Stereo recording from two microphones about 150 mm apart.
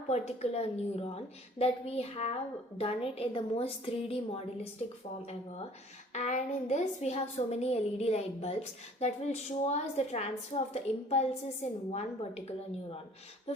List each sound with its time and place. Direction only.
0.1 s a woman's voice: 45° left (ahead or behind)
6.1 s a woman's voice: 50° left (ahead or behind)